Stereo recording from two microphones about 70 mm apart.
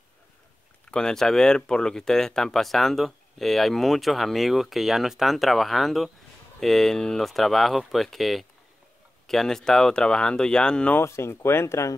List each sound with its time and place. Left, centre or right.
0.8 s speech: centre
11.1 s speech: left